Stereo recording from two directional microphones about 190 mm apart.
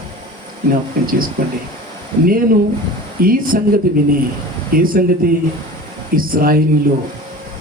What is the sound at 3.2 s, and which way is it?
Speech, 50° right (ahead or behind).